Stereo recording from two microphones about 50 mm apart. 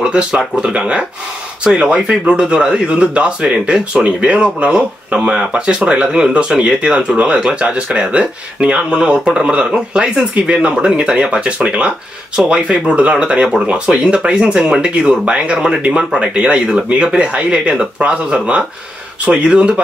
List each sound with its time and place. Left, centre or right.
0.0 s speech: centre